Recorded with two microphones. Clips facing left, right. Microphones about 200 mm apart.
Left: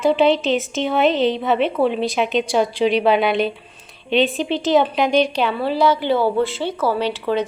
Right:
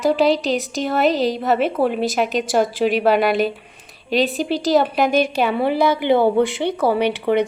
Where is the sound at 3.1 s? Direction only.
45° right (ahead or behind).